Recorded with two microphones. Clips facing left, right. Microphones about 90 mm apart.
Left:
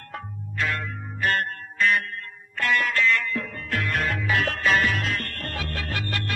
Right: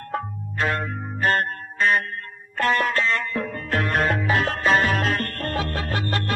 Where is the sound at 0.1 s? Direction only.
40° right (ahead or behind).